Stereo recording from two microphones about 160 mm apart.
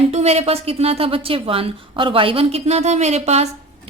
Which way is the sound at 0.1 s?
40° right (ahead or behind).